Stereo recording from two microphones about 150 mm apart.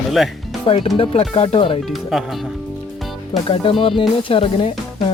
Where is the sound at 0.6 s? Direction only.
35° left (ahead or behind).